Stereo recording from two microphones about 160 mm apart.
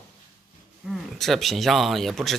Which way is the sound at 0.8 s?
Centre (ahead or behind).